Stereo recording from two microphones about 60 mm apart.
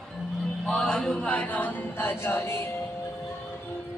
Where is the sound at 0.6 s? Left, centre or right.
Centre; by 2.6 s left.